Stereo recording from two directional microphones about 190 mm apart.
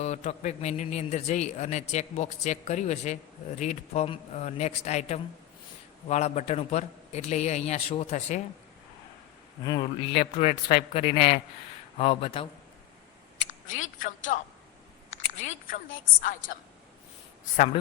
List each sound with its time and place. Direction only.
0.0 s a man's voice: 35° left (ahead or behind)
9.6 s a man's voice: 25° left (ahead or behind)
13.4 s speech: 40° left (ahead or behind)
15.4 s a woman's voice: 45° left (ahead or behind)